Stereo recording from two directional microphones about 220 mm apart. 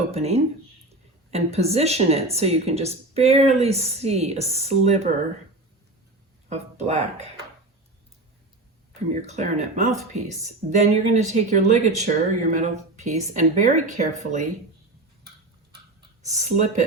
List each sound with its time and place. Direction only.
0.1 s speech: 30° right (ahead or behind)
6.5 s speech: 30° right (ahead or behind)
9.2 s speech: 30° right (ahead or behind)
15.7 s a sound: 25° right (ahead or behind)